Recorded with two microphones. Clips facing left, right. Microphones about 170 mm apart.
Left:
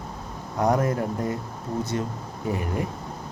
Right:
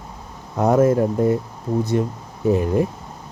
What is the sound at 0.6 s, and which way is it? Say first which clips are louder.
Speech: right 7 dB; 25° right (ahead or behind).